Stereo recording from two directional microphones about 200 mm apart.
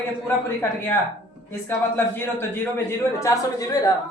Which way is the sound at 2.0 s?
10° left (ahead or behind).